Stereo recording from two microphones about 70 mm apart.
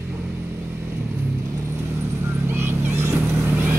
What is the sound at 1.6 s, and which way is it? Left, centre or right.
Vehicle, right.